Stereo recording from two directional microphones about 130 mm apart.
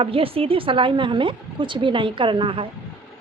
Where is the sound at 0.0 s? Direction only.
45° right (ahead or behind).